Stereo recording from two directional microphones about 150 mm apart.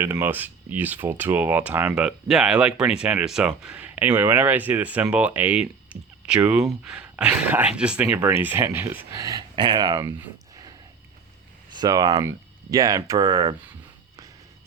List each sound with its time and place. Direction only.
0.0 s speech: 15° right (ahead or behind)
9.1 s speech: 25° right (ahead or behind)
10.2 s a sound: 25° right (ahead or behind)
11.7 s speech: 25° right (ahead or behind)